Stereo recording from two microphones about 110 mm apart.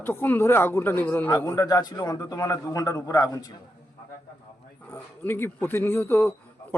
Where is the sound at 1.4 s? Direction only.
30° left (ahead or behind).